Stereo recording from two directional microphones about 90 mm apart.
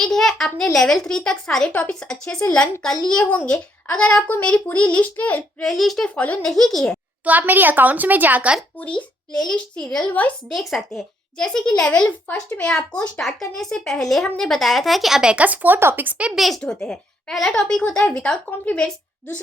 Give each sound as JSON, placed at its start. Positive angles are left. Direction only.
{"t": 0.0, "sound": "a child's voice", "side_deg": 5}
{"t": 5.6, "sound": "a child's voice", "side_deg": 0}
{"t": 6.1, "sound": "a child's voice", "side_deg": 15}
{"t": 6.4, "sound": "a child's voice", "side_deg": 5}
{"t": 7.3, "sound": "a woman's voice", "side_deg": -20}
{"t": 8.8, "sound": "a child's voice", "side_deg": 15}
{"t": 16.4, "sound": "a child's voice", "side_deg": 5}